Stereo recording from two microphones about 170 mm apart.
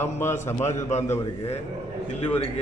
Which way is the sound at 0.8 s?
45° left (ahead or behind).